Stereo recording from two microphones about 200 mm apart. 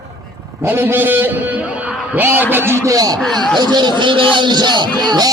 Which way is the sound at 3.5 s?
20° right (ahead or behind).